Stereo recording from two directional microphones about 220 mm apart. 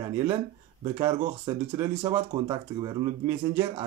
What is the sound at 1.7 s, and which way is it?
Speech, 15° right (ahead or behind).